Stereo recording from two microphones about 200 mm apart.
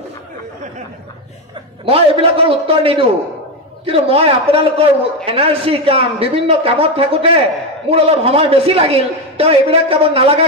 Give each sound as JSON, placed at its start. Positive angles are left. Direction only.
{"t": 1.9, "sound": "a man's voice", "side_deg": -30}